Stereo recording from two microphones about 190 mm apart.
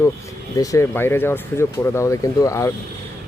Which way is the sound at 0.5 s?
15° left (ahead or behind).